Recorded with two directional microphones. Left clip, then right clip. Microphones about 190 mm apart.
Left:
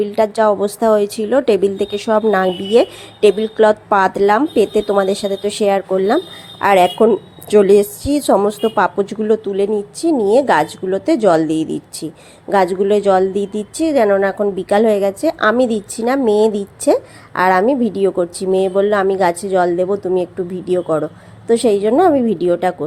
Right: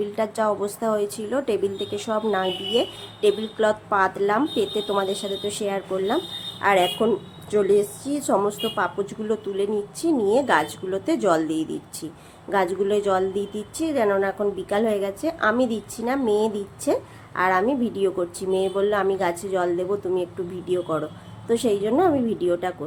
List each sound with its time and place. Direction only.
0.0 s a woman's voice: 30° left (ahead or behind)